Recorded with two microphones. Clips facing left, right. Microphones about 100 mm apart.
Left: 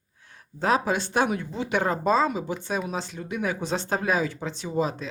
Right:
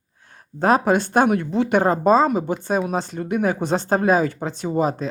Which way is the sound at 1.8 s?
40° right (ahead or behind).